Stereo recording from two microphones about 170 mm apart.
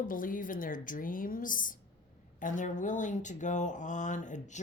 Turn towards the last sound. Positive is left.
turn(degrees=45)  # may be behind; listen again after turning